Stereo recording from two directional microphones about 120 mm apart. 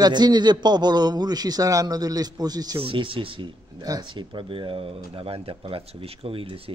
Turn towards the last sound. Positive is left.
turn(degrees=-50)  # may be behind; listen again after turning